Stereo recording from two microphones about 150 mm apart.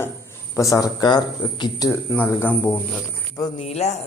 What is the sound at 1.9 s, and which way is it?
Speech, 15° left (ahead or behind).